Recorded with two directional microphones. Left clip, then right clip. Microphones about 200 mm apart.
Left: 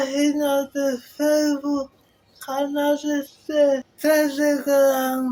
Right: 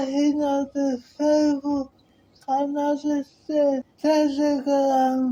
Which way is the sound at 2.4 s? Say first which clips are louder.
Left 1 dB; 25° left (ahead or behind).